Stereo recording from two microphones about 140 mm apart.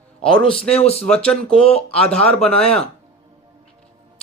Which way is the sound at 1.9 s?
5° left (ahead or behind).